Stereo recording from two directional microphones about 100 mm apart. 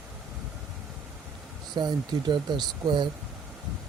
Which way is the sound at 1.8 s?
50° right (ahead or behind).